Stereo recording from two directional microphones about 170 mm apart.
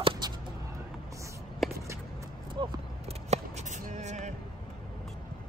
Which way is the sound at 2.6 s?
40° right (ahead or behind).